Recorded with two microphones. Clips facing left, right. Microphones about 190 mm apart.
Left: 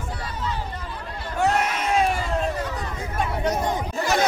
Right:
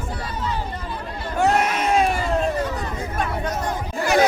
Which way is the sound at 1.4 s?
75° right (ahead or behind).